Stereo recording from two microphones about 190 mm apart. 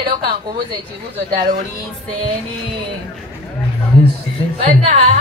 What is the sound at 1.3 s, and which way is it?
Music, 45° right (ahead or behind).